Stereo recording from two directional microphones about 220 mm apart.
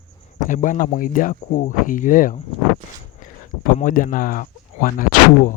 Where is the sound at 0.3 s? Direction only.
35° left (ahead or behind).